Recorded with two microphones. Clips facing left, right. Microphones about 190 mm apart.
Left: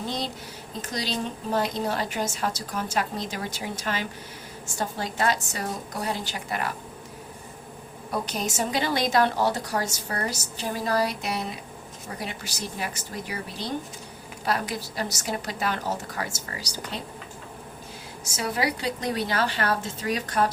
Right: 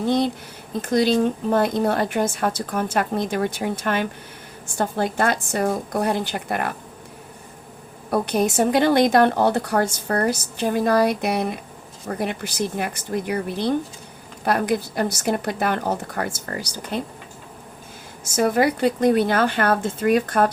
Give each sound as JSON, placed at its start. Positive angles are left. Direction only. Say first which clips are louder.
{"t": 0.8, "sound": "speech", "louder": "right 12 dB", "side_deg": -55}
{"t": 8.1, "sound": "speech", "louder": "right 9 dB", "side_deg": -55}
{"t": 18.3, "sound": "speech", "louder": "right 9 dB", "side_deg": -50}